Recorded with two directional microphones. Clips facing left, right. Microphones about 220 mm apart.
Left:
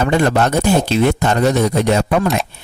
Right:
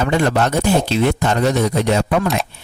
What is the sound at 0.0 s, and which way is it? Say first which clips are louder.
Speech: left 2 dB; 45° left (ahead or behind).